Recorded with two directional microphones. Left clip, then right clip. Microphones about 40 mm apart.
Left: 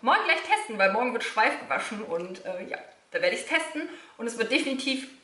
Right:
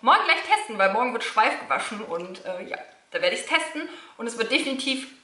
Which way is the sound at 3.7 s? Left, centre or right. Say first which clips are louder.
Right 1 dB; left.